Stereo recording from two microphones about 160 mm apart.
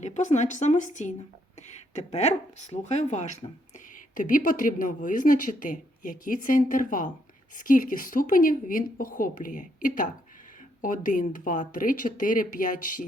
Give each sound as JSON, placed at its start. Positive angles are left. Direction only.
{"t": 0.0, "sound": "a woman's voice", "side_deg": 45}